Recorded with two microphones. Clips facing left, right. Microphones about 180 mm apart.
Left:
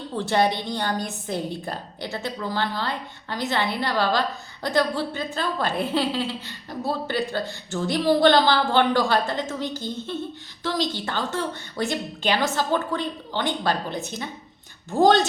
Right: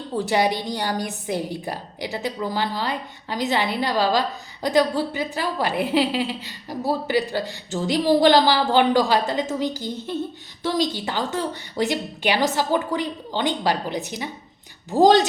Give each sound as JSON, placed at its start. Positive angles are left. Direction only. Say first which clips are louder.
{"t": 0.2, "sound": "a woman's voice", "louder": "right 1 dB", "side_deg": -10}